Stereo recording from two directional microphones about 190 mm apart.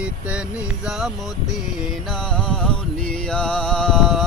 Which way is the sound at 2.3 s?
5° left (ahead or behind).